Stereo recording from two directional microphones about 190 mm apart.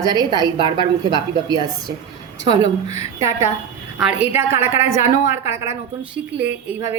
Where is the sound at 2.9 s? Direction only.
15° right (ahead or behind).